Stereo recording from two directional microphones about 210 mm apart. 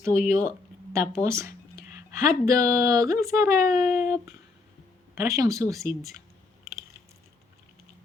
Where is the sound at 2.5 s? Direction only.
15° right (ahead or behind).